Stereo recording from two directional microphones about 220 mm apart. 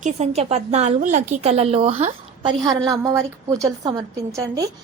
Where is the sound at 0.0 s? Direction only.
30° right (ahead or behind).